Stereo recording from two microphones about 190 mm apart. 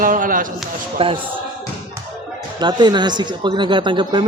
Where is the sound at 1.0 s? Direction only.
30° right (ahead or behind).